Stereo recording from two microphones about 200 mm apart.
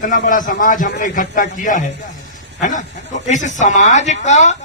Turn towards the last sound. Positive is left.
turn(degrees=35)  # may be behind; listen again after turning